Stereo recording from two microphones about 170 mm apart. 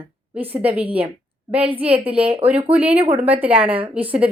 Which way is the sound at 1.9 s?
35° right (ahead or behind).